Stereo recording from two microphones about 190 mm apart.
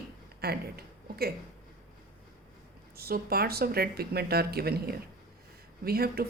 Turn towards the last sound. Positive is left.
turn(degrees=-55)  # may be behind; listen again after turning